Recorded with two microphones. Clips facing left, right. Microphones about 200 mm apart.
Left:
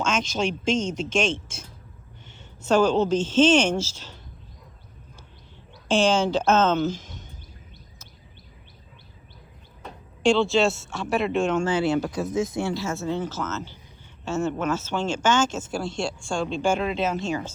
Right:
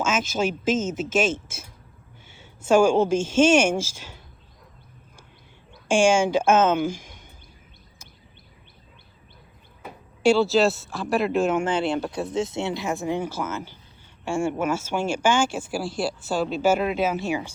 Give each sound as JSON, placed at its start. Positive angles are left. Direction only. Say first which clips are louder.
{"t": 0.0, "sound": "a woman's voice", "louder": "right 1 dB", "side_deg": -5}
{"t": 5.9, "sound": "speech", "louder": "right 2 dB", "side_deg": -10}
{"t": 9.8, "sound": "speech", "louder": "right 2 dB", "side_deg": -5}
{"t": 12.2, "sound": "a woman's voice", "louder": "left 1 dB", "side_deg": -30}